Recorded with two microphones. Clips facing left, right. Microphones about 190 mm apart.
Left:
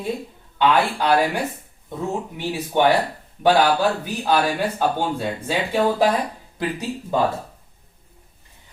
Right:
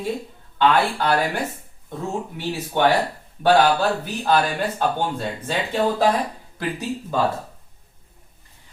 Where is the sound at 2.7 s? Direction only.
15° left (ahead or behind).